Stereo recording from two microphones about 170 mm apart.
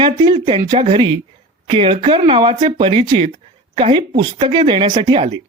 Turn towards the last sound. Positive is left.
turn(degrees=-30)  # may be behind; listen again after turning